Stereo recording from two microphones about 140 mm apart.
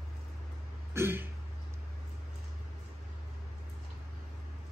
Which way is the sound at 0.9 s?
15° right (ahead or behind).